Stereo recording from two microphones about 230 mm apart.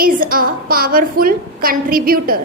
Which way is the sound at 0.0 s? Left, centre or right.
Right.